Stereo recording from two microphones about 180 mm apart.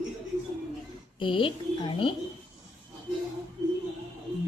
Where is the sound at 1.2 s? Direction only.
30° left (ahead or behind).